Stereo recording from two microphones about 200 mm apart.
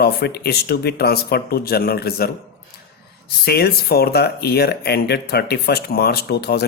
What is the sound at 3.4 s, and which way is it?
Speech, 50° left (ahead or behind).